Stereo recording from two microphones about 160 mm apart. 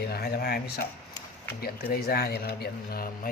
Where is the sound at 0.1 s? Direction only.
80° left.